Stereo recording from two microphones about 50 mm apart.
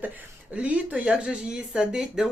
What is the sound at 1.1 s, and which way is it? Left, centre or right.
A woman's voice, centre.